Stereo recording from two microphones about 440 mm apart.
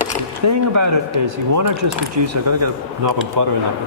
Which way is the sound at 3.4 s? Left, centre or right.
Right.